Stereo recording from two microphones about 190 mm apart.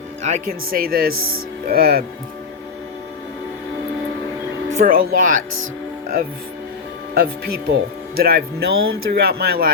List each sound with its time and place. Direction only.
0.2 s speech: 35° right (ahead or behind)
4.7 s speech: 45° right (ahead or behind)
7.7 s speech: 55° right (ahead or behind)